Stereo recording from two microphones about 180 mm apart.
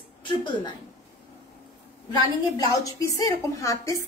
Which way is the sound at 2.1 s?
20° left (ahead or behind).